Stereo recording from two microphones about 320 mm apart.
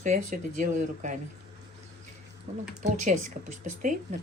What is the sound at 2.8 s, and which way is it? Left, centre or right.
Speech, right.